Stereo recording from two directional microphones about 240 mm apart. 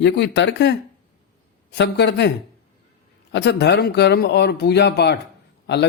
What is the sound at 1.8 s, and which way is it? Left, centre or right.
Speech, left.